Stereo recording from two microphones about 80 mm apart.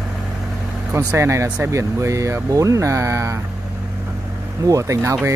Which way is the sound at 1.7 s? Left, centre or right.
Right.